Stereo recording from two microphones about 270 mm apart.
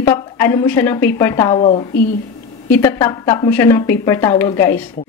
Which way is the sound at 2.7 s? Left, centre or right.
Centre.